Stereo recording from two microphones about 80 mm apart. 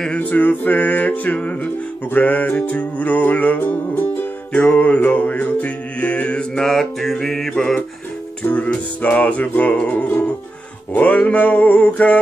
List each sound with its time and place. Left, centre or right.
0.2 s music: left
8.5 s music: centre